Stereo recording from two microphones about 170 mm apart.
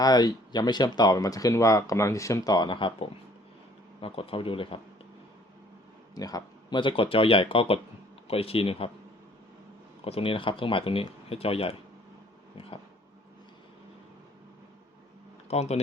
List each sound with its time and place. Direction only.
0.0 s speech: 20° left (ahead or behind)
6.1 s speech: 20° left (ahead or behind)
10.0 s speech: 35° left (ahead or behind)
15.4 s speech: 40° left (ahead or behind)